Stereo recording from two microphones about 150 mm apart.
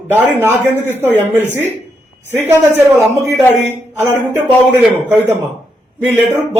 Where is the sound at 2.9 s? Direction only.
10° left (ahead or behind).